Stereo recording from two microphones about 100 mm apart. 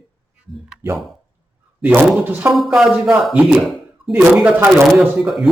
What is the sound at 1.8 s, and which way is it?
Speech, 15° right (ahead or behind).